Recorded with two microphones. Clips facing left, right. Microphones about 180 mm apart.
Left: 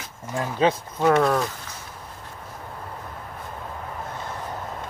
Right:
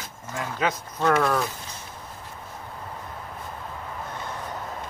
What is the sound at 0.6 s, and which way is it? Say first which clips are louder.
Speech: left 6 dB; 30° left (ahead or behind).